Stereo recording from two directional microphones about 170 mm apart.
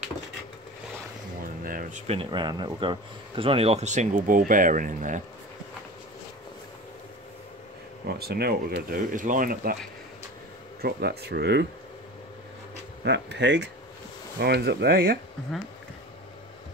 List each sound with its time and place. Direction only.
1.4 s a sound: 55° right (ahead or behind)
2.1 s speech: 25° right (ahead or behind); by 5.2 s 50° right (ahead or behind)
8.1 s speech: 70° right (ahead or behind)
10.8 s speech: 65° right (ahead or behind)
13.0 s speech: 90° right
14.4 s speech: 75° right (ahead or behind)